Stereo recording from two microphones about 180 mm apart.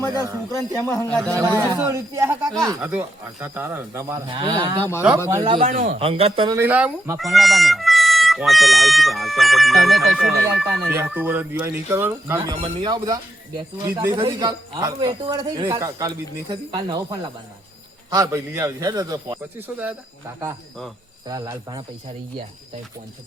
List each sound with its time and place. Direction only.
0.5 s speech: 15° left (ahead or behind)
1.2 s speech: 15° right (ahead or behind)
4.8 s speech: 15° left (ahead or behind)
5.5 s a man's voice: 50° right (ahead or behind)
6.0 s speech: 35° right (ahead or behind)
6.6 s speech: 10° right (ahead or behind)
10.8 s speech: 10° right (ahead or behind)
12.6 s speech: 25° right (ahead or behind); by 20.0 s 10° right (ahead or behind)
21.2 s speech: 20° right (ahead or behind)